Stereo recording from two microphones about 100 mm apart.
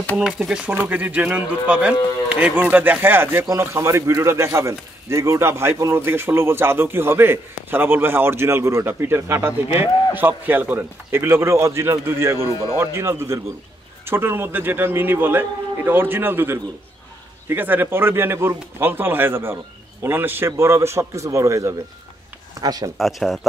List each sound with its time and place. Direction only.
0.2 s speech: 5° right (ahead or behind); by 22.8 s 40° right (ahead or behind)
22.9 s speech: centre (ahead or behind)